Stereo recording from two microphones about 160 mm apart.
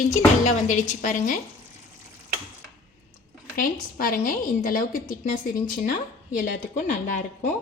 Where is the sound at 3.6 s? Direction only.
60° left (ahead or behind).